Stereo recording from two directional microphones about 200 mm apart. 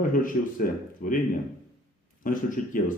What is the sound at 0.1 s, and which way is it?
A man's voice, 40° left (ahead or behind).